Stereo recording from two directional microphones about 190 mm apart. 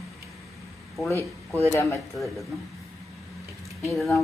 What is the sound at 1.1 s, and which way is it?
Speech, 15° left (ahead or behind).